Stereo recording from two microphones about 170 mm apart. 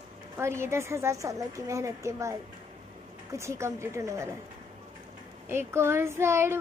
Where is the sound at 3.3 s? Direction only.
15° right (ahead or behind).